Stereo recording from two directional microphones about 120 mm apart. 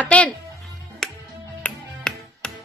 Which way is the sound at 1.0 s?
5° left (ahead or behind).